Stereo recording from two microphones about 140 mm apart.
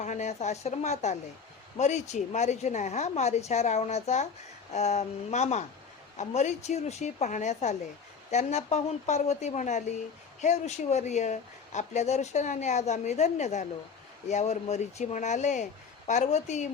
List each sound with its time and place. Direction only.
0.0 s a woman's voice: 60° left (ahead or behind)